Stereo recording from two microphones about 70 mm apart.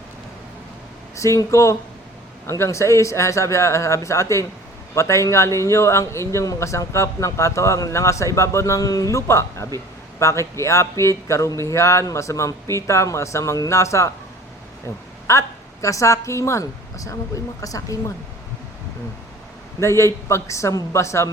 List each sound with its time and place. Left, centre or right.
1.1 s a man's voice: left
9.1 s a man's voice: left
19.8 s a man's voice: left